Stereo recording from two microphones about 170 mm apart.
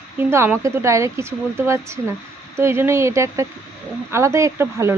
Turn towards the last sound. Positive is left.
turn(degrees=-15)  # may be behind; listen again after turning